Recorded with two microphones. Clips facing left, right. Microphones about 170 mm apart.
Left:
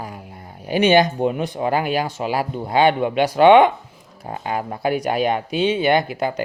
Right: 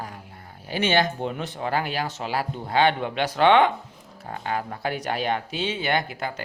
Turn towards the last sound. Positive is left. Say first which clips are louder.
# left 7 dB
turn(degrees=15)  # may be behind; listen again after turning